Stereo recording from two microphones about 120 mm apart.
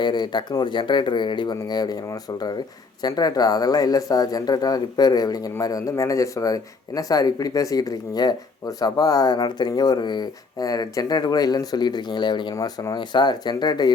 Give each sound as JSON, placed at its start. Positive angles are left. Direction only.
{"t": 0.0, "sound": "a man's voice", "side_deg": 40}